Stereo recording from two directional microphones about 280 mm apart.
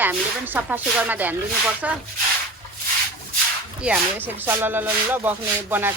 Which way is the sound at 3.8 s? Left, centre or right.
Centre.